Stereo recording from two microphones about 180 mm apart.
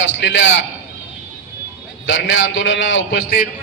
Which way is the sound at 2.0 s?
90° left.